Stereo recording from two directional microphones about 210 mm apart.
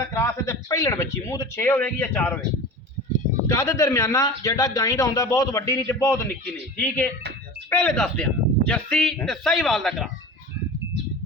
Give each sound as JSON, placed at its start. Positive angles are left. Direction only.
{"t": 0.1, "sound": "speech", "side_deg": 15}
{"t": 3.5, "sound": "speech", "side_deg": 15}